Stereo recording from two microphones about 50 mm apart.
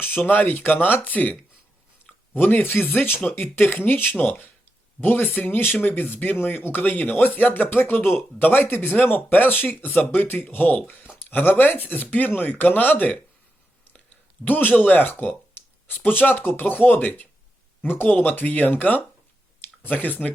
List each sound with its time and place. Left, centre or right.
0.0 s speech: left
3.5 s speech: left
10.5 s speech: left
14.4 s speech: left